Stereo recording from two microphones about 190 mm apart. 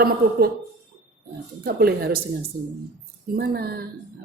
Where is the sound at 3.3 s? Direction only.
55° right (ahead or behind).